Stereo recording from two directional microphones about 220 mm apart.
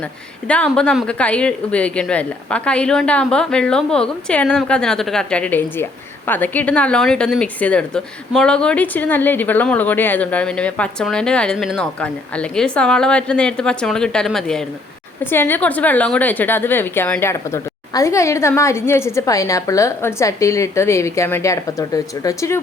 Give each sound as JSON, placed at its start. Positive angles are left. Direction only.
{"t": 0.4, "sound": "a woman's voice", "side_deg": 5}